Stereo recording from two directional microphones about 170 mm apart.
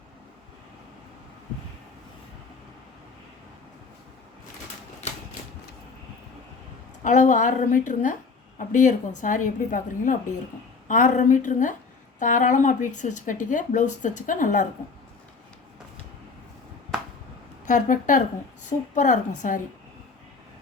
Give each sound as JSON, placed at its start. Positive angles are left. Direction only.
{"t": 7.0, "sound": "speech", "side_deg": 45}
{"t": 17.7, "sound": "speech", "side_deg": 50}